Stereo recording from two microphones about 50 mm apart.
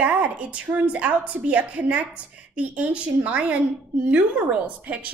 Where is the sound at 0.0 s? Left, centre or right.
Right.